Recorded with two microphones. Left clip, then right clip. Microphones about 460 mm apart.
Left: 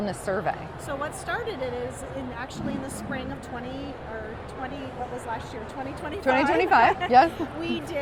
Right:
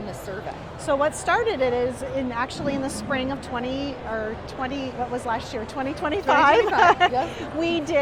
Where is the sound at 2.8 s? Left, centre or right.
Right.